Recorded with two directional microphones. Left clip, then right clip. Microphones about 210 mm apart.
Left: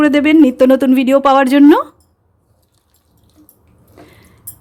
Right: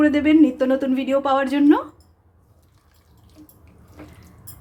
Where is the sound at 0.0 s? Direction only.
50° left (ahead or behind).